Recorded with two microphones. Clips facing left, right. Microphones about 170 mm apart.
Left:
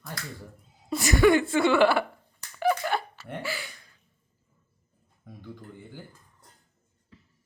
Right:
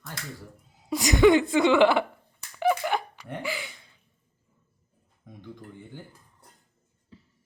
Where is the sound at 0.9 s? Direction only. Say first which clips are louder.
Right 2 dB; 15° right (ahead or behind).